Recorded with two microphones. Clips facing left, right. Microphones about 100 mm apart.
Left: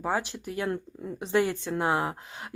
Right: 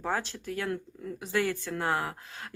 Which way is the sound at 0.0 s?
15° left (ahead or behind).